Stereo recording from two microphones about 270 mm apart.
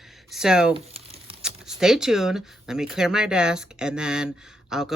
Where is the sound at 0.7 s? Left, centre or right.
Centre.